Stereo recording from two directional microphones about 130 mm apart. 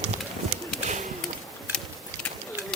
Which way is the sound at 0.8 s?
80° right.